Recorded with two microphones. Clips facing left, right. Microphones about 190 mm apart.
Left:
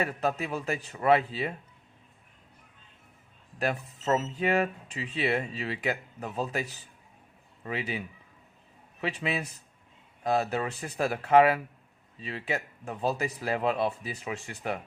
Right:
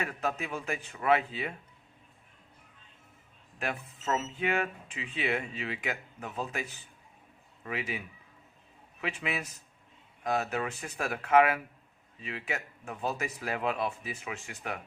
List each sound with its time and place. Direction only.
0.0 s speech: 35° left (ahead or behind)
3.6 s speech: 35° left (ahead or behind)